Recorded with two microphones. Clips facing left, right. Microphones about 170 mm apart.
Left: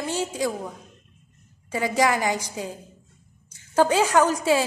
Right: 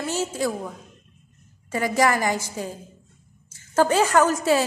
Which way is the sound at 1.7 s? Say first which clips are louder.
Right 1 dB; 10° left (ahead or behind).